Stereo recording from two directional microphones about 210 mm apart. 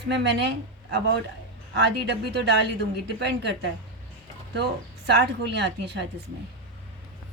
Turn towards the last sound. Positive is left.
turn(degrees=-55)  # may be behind; listen again after turning